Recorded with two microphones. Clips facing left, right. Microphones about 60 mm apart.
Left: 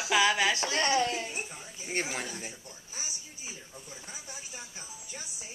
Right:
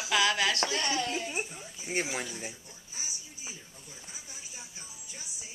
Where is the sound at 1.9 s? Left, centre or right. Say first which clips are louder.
Right 1 dB; centre.